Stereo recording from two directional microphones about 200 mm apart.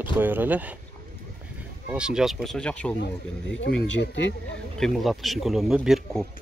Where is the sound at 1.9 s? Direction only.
5° right (ahead or behind).